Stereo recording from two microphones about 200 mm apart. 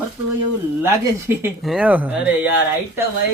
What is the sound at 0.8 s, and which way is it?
Speech, 10° right (ahead or behind).